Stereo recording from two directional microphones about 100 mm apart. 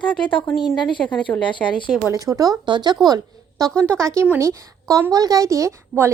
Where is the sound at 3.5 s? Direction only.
5° left (ahead or behind).